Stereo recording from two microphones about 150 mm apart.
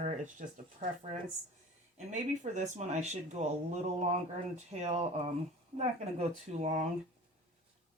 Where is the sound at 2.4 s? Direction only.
50° right (ahead or behind).